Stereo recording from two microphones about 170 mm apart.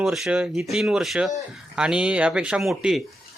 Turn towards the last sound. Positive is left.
turn(degrees=0)  # may be behind; listen again after turning